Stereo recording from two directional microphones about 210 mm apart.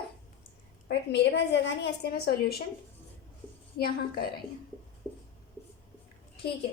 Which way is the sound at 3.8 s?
50° left (ahead or behind).